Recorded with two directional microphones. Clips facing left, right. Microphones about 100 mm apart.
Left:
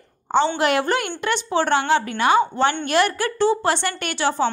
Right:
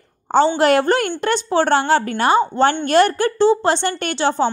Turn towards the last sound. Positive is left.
turn(degrees=-30)  # may be behind; listen again after turning